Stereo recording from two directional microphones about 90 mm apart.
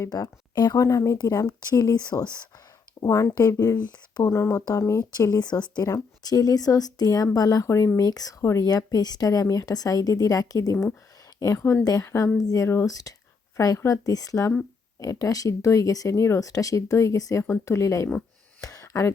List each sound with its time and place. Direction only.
0.0 s speech: 45° left (ahead or behind)
0.8 s speech: 40° left (ahead or behind)
3.0 s speech: 35° left (ahead or behind)
4.3 s speech: 30° left (ahead or behind)
5.1 s speech: 45° left (ahead or behind)
11.5 s speech: 25° left (ahead or behind)
11.9 s speech: 40° left (ahead or behind)
18.6 s a sound: 40° left (ahead or behind)